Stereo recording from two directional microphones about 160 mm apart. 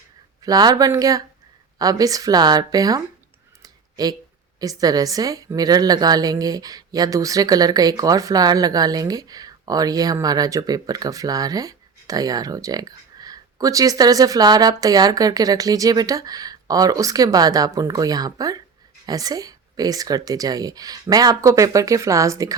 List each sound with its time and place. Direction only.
0.4 s a woman's voice: 25° right (ahead or behind)
3.6 s a sound: 25° right (ahead or behind)
4.6 s a woman's voice: 20° right (ahead or behind)